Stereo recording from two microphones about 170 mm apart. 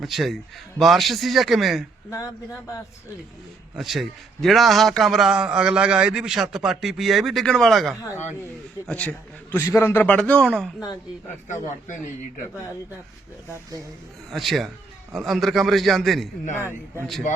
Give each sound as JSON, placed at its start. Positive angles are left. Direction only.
{"t": 0.0, "sound": "a man's voice", "side_deg": 0}
{"t": 2.0, "sound": "a man's voice", "side_deg": 15}
{"t": 3.8, "sound": "a man's voice", "side_deg": 0}
{"t": 9.5, "sound": "a man's voice", "side_deg": 15}
{"t": 13.5, "sound": "speech", "side_deg": -20}
{"t": 14.3, "sound": "a man's voice", "side_deg": 0}
{"t": 16.6, "sound": "a man's voice", "side_deg": -15}